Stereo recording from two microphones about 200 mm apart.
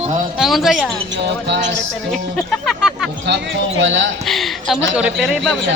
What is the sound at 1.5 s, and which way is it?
Music, 60° right (ahead or behind).